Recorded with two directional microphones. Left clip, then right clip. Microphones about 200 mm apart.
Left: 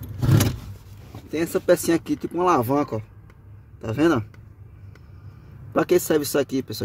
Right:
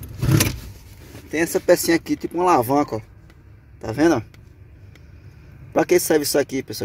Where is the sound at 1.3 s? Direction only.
10° left (ahead or behind).